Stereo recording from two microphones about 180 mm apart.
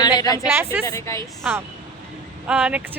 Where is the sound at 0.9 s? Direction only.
15° left (ahead or behind).